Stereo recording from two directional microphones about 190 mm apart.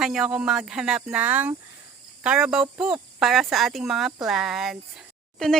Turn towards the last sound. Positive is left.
turn(degrees=0)  # may be behind; listen again after turning